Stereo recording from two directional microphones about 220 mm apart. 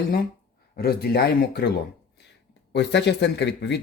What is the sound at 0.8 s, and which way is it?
Speech, 45° left (ahead or behind).